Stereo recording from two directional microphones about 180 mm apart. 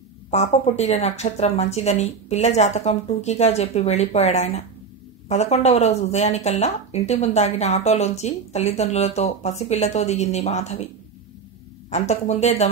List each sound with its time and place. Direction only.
0.3 s speech: 40° left (ahead or behind)
11.9 s speech: 35° left (ahead or behind)